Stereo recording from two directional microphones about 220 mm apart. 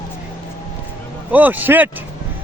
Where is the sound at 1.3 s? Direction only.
10° right (ahead or behind).